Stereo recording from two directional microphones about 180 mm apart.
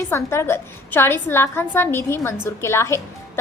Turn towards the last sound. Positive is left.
turn(degrees=15)  # may be behind; listen again after turning